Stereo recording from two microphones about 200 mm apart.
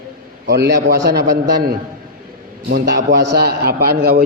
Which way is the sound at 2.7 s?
50° right (ahead or behind).